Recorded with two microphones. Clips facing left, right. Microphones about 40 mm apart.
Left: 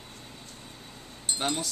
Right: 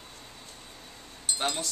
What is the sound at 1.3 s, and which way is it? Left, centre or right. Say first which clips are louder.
Speech: left 1 dB; centre.